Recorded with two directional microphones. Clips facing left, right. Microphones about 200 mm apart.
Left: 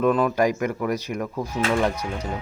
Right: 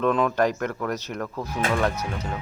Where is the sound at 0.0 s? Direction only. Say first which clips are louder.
Left 2 dB; 5° left (ahead or behind).